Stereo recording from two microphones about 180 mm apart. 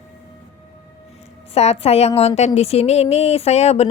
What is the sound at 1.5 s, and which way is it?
A woman's voice, 35° left (ahead or behind).